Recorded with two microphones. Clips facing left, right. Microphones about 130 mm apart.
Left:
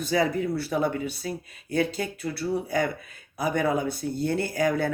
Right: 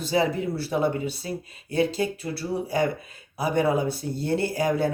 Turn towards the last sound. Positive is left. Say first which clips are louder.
# right 1 dB
turn(degrees=-30)  # may be behind; listen again after turning